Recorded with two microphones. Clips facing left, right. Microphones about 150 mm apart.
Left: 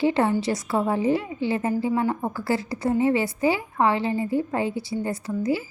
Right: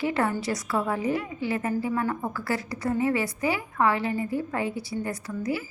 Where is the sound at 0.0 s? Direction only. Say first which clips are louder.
Left 5 dB; 25° left (ahead or behind).